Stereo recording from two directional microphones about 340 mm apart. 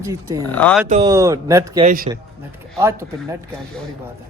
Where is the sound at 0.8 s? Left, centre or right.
Centre.